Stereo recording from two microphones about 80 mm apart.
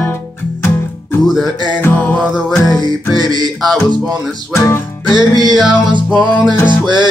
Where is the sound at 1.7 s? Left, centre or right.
Left.